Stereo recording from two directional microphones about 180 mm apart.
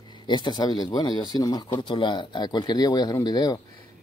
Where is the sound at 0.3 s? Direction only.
25° left (ahead or behind).